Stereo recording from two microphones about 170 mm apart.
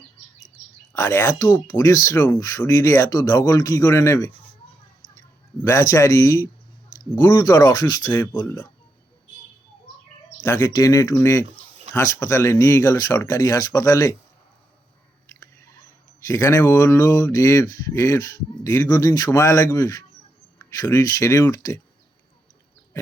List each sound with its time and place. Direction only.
0.9 s speech: 15° left (ahead or behind)
8.1 s speech: 10° left (ahead or behind)
10.4 s speech: 15° left (ahead or behind)
16.2 s speech: 20° left (ahead or behind)